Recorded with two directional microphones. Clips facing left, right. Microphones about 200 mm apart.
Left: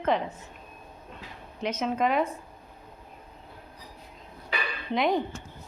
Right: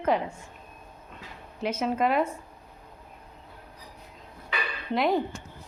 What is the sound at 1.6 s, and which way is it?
Speech, 5° right (ahead or behind).